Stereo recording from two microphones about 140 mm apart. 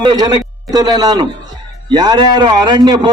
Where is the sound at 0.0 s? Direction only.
30° right (ahead or behind).